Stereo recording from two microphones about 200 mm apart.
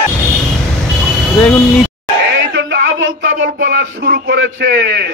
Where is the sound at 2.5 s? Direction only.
65° right (ahead or behind).